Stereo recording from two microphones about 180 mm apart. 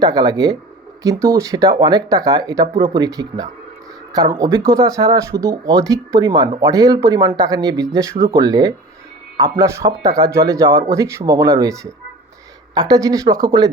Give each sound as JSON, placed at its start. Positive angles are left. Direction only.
{"t": 0.0, "sound": "speech", "side_deg": -20}